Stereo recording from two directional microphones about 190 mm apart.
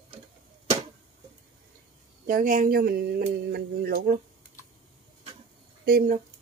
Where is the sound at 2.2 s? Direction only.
45° right (ahead or behind).